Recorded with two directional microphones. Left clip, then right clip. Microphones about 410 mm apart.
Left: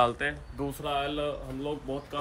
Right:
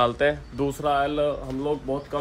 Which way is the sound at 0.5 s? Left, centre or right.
Right.